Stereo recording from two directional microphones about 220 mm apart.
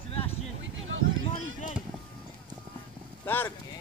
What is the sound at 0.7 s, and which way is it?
Speech, 60° right (ahead or behind).